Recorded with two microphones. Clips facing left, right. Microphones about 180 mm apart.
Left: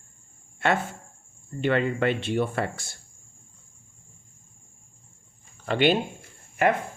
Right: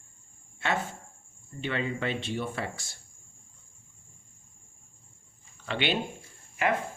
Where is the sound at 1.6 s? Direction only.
60° left (ahead or behind).